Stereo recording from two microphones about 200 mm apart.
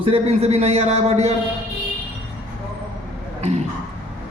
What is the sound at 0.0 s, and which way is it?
A man's voice, 30° right (ahead or behind).